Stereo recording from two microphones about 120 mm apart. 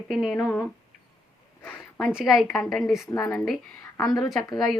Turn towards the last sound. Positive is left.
turn(degrees=0)  # may be behind; listen again after turning